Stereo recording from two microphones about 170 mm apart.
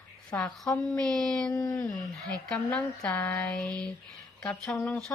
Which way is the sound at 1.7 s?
10° left (ahead or behind).